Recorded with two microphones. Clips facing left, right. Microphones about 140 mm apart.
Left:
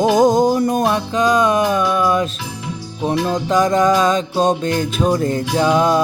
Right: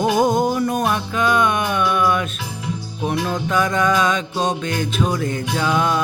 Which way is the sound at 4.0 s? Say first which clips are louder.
Left 4 dB; 40° left (ahead or behind).